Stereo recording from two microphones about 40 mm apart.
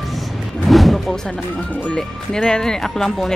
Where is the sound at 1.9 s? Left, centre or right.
Centre.